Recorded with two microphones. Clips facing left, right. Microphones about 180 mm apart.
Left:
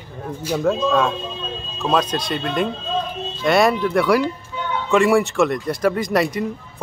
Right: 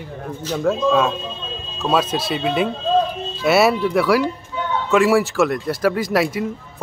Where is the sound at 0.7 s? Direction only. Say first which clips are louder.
Right 2 dB; centre (ahead or behind).